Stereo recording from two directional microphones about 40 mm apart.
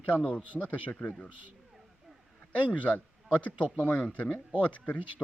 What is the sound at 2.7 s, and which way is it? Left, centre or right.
A man's voice, left.